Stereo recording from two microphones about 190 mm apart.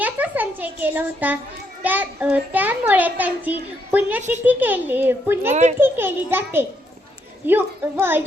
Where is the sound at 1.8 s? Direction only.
10° right (ahead or behind).